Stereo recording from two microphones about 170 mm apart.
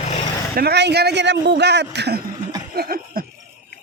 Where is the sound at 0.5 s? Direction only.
70° right (ahead or behind).